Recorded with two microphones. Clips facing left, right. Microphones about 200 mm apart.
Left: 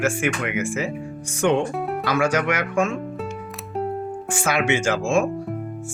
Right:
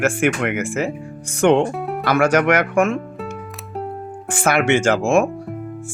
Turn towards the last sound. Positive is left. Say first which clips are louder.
# right 5 dB
turn(degrees=-55)  # may be behind; listen again after turning